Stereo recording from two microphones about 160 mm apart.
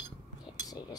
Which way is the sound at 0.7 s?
25° left (ahead or behind).